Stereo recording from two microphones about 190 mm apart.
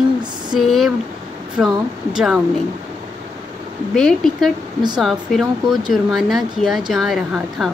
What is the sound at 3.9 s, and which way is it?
Speech, 5° left (ahead or behind).